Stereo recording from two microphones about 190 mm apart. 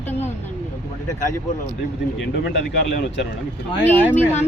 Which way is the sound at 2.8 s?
65° left (ahead or behind).